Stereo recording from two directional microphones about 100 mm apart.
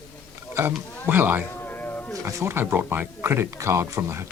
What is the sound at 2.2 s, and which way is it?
Speech, 30° right (ahead or behind).